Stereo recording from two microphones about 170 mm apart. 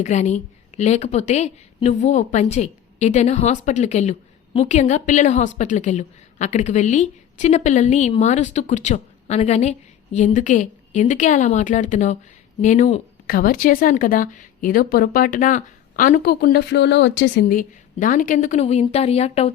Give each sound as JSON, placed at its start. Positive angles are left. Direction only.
{"t": 0.0, "sound": "a woman's voice", "side_deg": 45}
{"t": 13.2, "sound": "a woman's voice", "side_deg": 60}
{"t": 17.5, "sound": "a woman's voice", "side_deg": 50}